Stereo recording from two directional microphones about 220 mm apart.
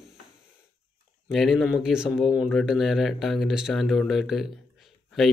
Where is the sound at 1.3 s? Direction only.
Centre (ahead or behind).